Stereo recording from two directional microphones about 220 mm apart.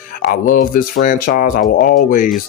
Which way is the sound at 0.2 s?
40° left (ahead or behind).